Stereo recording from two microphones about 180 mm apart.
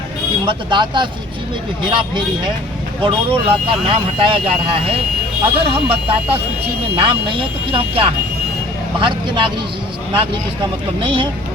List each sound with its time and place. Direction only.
0.4 s speech: 25° right (ahead or behind)